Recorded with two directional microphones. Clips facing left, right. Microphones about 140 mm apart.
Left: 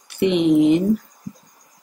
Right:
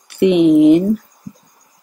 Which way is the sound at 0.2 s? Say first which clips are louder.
Right 6 dB; 55° right (ahead or behind).